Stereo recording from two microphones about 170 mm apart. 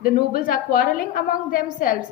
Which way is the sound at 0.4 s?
55° left (ahead or behind).